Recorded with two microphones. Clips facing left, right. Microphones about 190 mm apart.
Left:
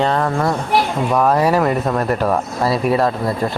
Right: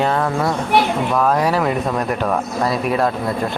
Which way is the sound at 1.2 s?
10° left (ahead or behind).